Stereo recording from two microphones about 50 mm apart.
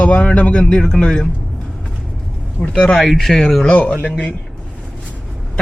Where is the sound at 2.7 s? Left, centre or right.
Centre.